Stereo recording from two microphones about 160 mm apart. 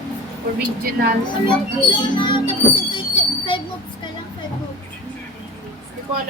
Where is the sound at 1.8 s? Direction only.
30° left (ahead or behind).